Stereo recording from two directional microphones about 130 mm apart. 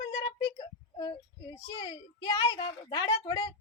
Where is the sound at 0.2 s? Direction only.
35° left (ahead or behind).